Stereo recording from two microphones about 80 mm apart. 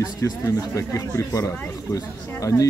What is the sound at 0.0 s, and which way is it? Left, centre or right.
Speech, left.